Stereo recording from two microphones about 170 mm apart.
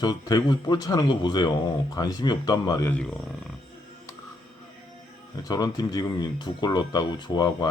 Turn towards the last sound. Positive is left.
turn(degrees=25)  # may be behind; listen again after turning